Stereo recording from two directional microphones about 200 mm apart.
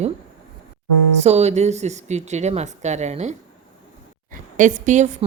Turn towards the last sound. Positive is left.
turn(degrees=-35)  # may be behind; listen again after turning